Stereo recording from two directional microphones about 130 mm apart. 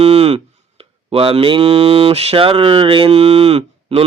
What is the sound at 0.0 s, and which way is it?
Speech, 50° right (ahead or behind).